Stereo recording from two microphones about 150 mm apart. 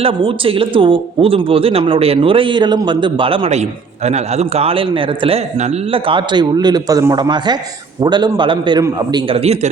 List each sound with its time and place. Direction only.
0.0 s speech: 35° right (ahead or behind)
5.5 s speech: 50° right (ahead or behind)
6.1 s a man's voice: 30° right (ahead or behind)
9.2 s speech: 40° right (ahead or behind)